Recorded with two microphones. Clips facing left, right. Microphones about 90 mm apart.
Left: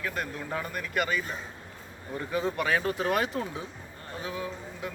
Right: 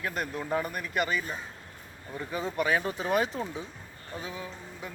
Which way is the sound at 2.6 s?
15° right (ahead or behind).